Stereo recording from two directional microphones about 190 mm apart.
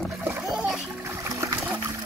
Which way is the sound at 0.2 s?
5° right (ahead or behind).